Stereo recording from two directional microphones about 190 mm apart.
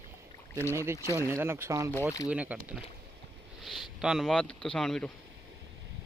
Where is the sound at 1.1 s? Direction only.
10° right (ahead or behind).